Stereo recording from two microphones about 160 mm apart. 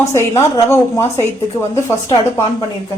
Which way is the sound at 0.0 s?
20° left (ahead or behind).